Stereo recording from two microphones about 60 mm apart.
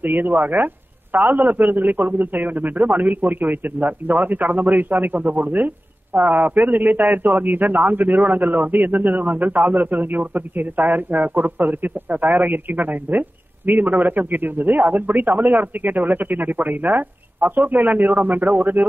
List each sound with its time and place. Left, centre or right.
0.0 s a man's voice: right